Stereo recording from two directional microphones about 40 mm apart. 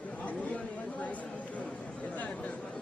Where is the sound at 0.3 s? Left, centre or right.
Left.